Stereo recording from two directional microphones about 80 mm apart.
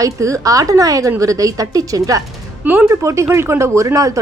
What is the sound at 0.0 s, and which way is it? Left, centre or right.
A woman's voice, right.